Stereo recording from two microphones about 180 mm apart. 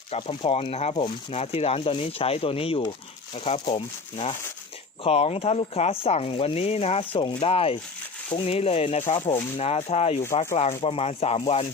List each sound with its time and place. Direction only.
0.1 s speech: 35° left (ahead or behind)